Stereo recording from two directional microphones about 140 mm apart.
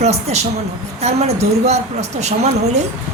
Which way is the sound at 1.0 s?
50° right (ahead or behind).